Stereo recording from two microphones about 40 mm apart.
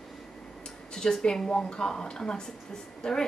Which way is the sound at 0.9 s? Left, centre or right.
Centre.